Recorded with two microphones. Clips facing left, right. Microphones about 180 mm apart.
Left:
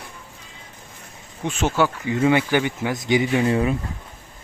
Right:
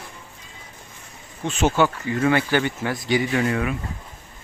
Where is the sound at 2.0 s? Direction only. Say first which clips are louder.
Left 2 dB; 20° left (ahead or behind).